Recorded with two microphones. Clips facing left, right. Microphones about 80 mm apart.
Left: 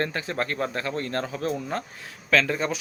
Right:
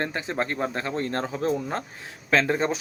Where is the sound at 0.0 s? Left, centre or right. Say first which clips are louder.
Even; right.